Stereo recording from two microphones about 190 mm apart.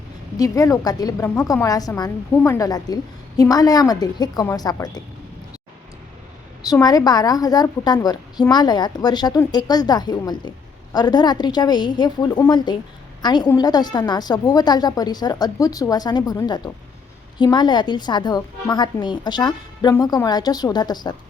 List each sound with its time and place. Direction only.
0.3 s a woman's voice: 20° left (ahead or behind)
6.6 s a woman's voice: 20° left (ahead or behind)